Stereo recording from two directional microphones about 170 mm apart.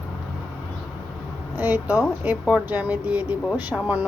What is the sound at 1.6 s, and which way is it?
Speech, 10° right (ahead or behind).